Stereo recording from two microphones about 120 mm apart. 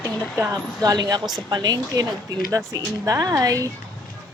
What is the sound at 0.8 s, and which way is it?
Speech, 30° right (ahead or behind).